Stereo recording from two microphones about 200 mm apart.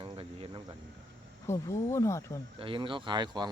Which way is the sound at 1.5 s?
15° left (ahead or behind).